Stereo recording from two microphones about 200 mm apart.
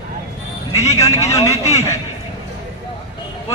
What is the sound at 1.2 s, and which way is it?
Speech, 15° left (ahead or behind).